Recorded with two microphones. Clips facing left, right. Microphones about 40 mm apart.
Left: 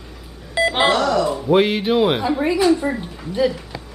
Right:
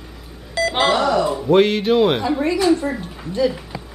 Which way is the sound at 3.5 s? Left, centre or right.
Centre.